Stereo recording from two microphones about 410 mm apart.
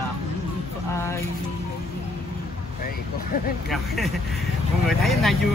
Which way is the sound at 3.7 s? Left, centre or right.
Centre.